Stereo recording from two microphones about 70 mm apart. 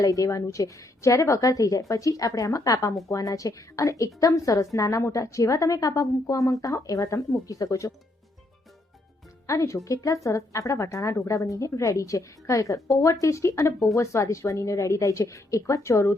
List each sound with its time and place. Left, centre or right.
0.0 s a woman's voice: left
9.5 s a woman's voice: left